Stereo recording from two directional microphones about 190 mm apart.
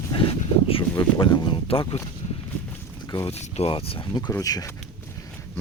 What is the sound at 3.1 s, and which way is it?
Speech, 20° left (ahead or behind).